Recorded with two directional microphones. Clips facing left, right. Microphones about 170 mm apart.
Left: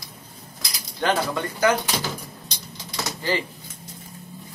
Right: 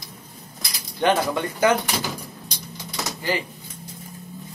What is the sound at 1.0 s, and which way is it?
Speech, 20° right (ahead or behind).